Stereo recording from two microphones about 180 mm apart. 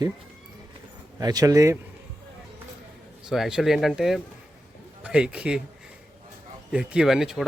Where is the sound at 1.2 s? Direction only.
20° right (ahead or behind).